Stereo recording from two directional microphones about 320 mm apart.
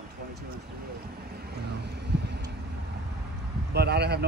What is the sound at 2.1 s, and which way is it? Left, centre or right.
Vehicle, right.